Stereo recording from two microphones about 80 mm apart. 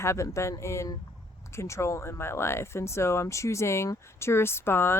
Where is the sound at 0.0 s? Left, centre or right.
Left.